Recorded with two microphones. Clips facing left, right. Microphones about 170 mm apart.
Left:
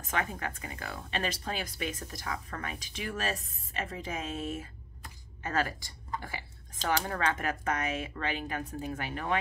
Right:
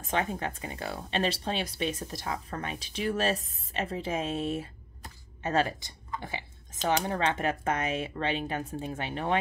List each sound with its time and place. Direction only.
0.1 s speech: 25° right (ahead or behind)